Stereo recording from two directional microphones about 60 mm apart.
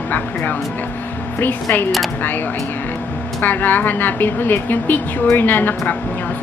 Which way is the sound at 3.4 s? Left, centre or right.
Left.